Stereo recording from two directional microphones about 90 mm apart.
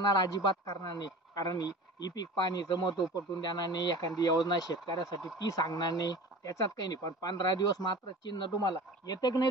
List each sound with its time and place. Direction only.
0.1 s speech: 45° left (ahead or behind)